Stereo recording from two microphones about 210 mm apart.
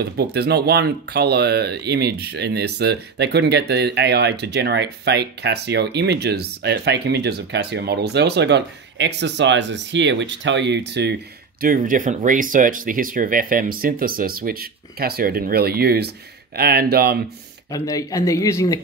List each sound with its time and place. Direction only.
0.0 s speech: 50° right (ahead or behind)
11.6 s speech: 40° right (ahead or behind)
17.6 s speech: 15° left (ahead or behind)